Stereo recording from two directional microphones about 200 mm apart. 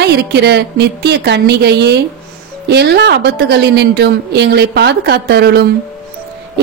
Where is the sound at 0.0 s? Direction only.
55° right (ahead or behind).